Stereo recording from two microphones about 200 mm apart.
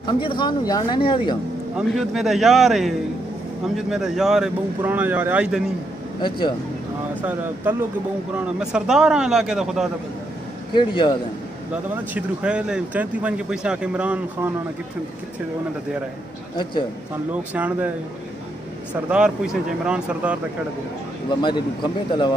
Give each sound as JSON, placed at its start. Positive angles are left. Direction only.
{"t": 0.0, "sound": "speech", "side_deg": 25}
{"t": 1.8, "sound": "speech", "side_deg": 0}
{"t": 6.2, "sound": "speech", "side_deg": 25}
{"t": 7.2, "sound": "speech", "side_deg": -10}
{"t": 10.7, "sound": "speech", "side_deg": 25}
{"t": 11.9, "sound": "speech", "side_deg": -5}
{"t": 17.6, "sound": "speech", "side_deg": -10}
{"t": 19.0, "sound": "speech", "side_deg": -5}
{"t": 21.4, "sound": "speech", "side_deg": 20}